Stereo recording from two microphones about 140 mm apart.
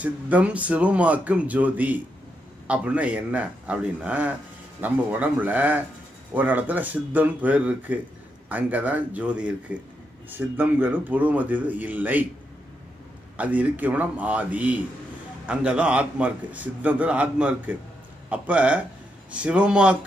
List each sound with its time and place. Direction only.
0.0 s a man's voice: 10° right (ahead or behind)
13.4 s a man's voice: 10° right (ahead or behind)